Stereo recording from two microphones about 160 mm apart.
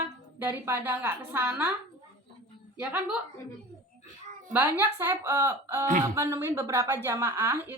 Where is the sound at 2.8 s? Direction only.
10° right (ahead or behind).